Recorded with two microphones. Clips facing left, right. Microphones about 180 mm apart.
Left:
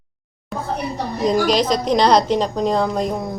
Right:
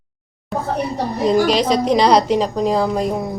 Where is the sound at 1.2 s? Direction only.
5° right (ahead or behind).